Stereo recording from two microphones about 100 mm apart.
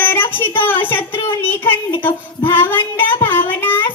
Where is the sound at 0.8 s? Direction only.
20° left (ahead or behind).